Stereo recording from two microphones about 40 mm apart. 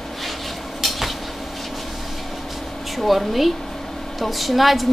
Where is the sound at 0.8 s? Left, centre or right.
Centre.